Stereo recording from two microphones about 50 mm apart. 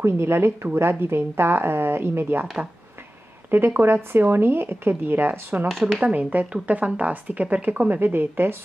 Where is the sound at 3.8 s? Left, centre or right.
Right.